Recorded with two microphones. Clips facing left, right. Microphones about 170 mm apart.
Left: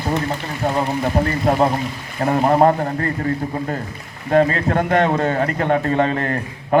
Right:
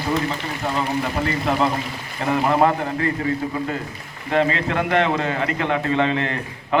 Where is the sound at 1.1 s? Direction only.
45° left (ahead or behind).